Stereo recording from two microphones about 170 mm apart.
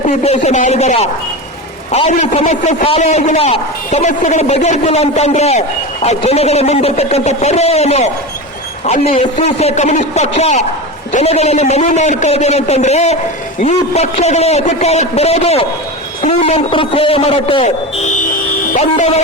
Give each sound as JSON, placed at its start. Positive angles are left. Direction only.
{"t": 0.1, "sound": "a man's voice", "side_deg": 40}
{"t": 17.6, "sound": "speech", "side_deg": 45}